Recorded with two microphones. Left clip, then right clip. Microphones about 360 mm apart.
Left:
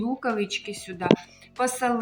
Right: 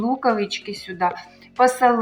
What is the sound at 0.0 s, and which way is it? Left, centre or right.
A woman's voice, left.